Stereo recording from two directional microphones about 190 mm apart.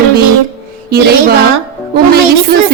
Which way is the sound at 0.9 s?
55° right (ahead or behind).